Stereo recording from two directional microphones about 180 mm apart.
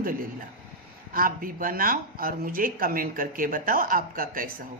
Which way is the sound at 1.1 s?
50° right (ahead or behind).